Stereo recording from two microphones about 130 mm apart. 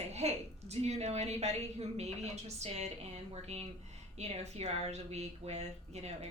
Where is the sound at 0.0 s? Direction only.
55° right (ahead or behind).